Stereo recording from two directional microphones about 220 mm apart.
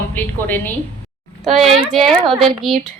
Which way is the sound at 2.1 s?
20° right (ahead or behind).